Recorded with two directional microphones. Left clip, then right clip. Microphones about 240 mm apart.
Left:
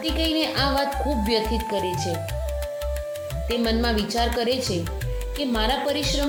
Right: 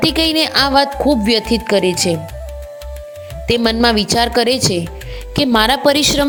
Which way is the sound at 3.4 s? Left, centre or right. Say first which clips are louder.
Right 11 dB; right.